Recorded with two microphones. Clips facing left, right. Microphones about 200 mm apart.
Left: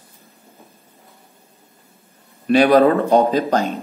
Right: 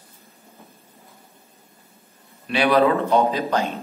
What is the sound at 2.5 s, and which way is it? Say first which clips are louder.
Speech: left 5 dB; 45° left (ahead or behind).